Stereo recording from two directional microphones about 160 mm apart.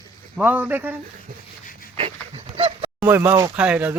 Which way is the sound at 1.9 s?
40° right (ahead or behind).